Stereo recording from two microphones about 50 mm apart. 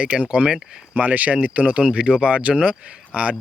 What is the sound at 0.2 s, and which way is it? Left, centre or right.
Speech, right.